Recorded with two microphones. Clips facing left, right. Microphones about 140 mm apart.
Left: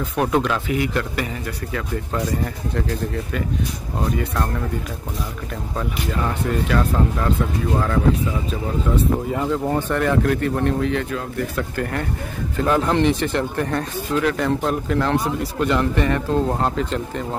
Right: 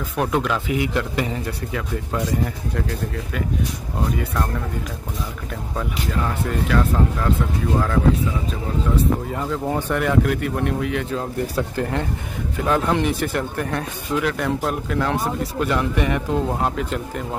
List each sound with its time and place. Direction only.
0.1 s speech: centre (ahead or behind)
0.7 s speech: 15° right (ahead or behind)
9.3 s speech: 5° left (ahead or behind)
9.8 s speech: 10° right (ahead or behind)
11.1 s speech: 25° right (ahead or behind)
12.6 s speech: centre (ahead or behind)